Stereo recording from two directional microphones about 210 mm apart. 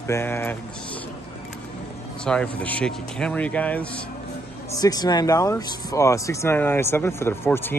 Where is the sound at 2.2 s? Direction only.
5° left (ahead or behind).